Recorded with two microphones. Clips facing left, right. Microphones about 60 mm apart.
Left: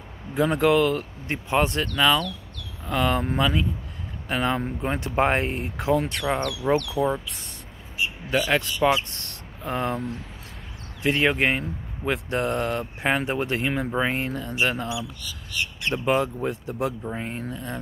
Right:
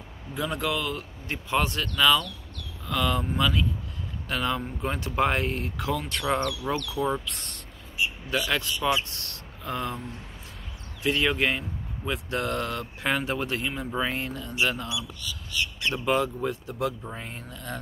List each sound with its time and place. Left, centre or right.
0.3 s speech: left
6.1 s speech: centre
7.0 s speech: centre
8.3 s speech: left
11.0 s speech: left
12.3 s speech: left
15.9 s speech: left